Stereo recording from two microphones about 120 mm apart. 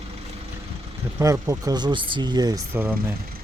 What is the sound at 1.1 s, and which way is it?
Speech, 25° right (ahead or behind).